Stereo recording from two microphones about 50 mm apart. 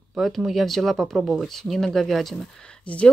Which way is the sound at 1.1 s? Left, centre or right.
Centre.